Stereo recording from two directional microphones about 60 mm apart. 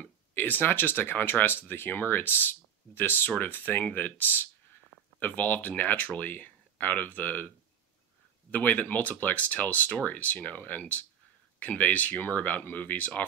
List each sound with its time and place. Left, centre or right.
0.3 s speech: left